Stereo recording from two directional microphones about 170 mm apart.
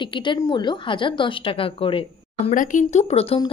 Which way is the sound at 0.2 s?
25° left (ahead or behind).